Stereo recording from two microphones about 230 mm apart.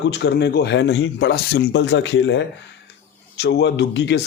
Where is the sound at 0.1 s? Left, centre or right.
Left.